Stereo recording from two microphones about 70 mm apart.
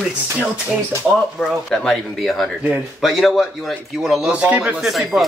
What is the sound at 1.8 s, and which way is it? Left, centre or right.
A man's voice, centre.